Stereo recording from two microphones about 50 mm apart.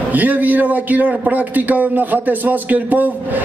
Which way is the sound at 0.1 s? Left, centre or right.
Right.